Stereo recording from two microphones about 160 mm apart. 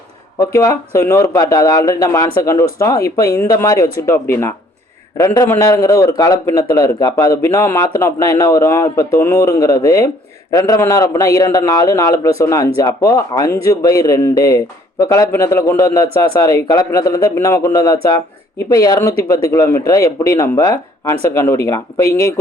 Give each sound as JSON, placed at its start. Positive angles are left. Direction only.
{"t": 0.3, "sound": "a man's voice", "side_deg": 20}